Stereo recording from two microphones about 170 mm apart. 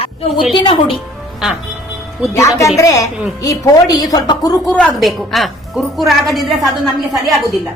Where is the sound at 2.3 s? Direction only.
15° left (ahead or behind).